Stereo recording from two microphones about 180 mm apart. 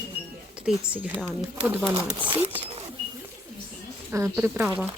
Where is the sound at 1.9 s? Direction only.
30° right (ahead or behind).